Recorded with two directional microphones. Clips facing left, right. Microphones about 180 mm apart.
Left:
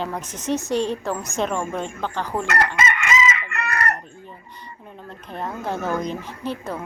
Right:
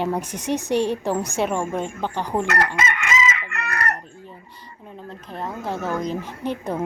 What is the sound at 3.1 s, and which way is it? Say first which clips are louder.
Chicken: left 1 dB; 65° left (ahead or behind).